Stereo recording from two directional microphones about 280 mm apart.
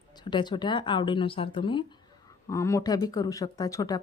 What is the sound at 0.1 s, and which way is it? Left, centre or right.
A woman's voice, centre.